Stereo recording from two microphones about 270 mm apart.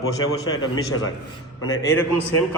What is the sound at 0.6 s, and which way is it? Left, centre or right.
Speech, left.